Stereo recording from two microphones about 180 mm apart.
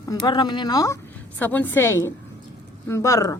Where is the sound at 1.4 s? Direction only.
10° left (ahead or behind).